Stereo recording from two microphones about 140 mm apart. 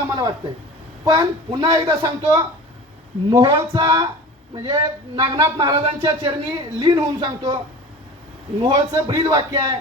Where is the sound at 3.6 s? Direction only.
30° right (ahead or behind).